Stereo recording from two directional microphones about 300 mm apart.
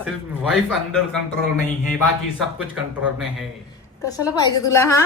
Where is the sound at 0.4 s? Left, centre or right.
Centre.